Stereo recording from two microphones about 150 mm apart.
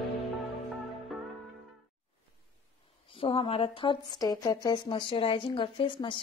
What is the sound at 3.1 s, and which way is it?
Speech, 40° left (ahead or behind).